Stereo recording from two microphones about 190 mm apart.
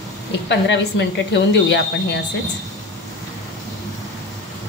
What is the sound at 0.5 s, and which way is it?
A woman's voice, 70° left (ahead or behind).